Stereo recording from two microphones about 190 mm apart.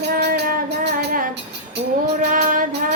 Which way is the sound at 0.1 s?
50° right (ahead or behind).